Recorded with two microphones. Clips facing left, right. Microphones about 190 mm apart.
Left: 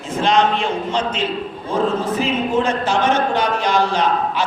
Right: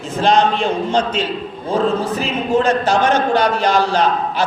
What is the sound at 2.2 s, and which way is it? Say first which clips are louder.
Speech: right 1 dB; 40° right (ahead or behind).